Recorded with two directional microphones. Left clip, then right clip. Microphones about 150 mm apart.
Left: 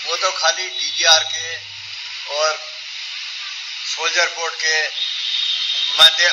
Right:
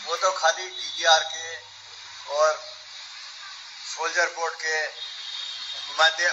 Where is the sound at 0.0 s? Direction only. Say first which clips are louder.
Left 4 dB; 40° left (ahead or behind).